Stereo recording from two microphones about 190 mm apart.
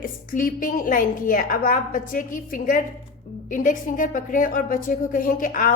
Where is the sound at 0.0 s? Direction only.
45° left (ahead or behind).